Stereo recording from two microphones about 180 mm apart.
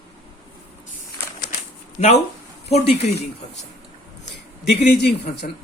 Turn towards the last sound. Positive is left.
turn(degrees=65)  # may be behind; listen again after turning